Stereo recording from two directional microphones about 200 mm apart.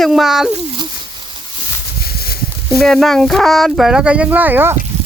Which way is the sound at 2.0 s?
50° left (ahead or behind).